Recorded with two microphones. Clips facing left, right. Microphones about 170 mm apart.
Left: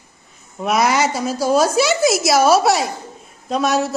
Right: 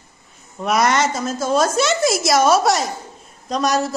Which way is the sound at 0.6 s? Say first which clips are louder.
Left 1 dB; centre (ahead or behind).